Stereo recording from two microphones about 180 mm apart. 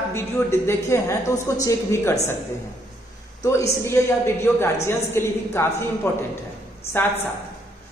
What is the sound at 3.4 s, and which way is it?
A woman's voice, 15° left (ahead or behind).